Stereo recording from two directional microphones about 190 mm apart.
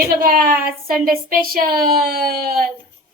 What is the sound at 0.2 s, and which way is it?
A woman's voice, 50° right (ahead or behind).